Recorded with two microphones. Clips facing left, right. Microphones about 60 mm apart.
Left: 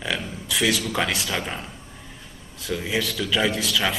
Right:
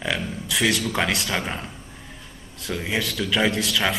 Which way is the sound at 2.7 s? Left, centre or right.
Centre.